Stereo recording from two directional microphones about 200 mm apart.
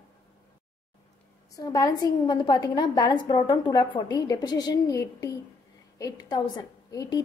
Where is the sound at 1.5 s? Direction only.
20° left (ahead or behind).